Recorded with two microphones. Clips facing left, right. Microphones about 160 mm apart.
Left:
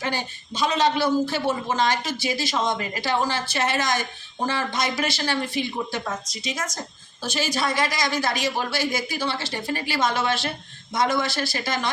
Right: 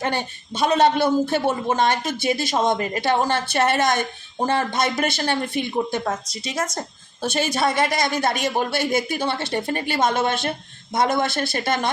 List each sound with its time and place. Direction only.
0.0 s speech: 60° right (ahead or behind)
7.2 s speech: 55° right (ahead or behind)